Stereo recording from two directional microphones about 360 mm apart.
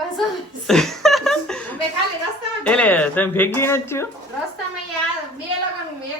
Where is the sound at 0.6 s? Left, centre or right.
Centre.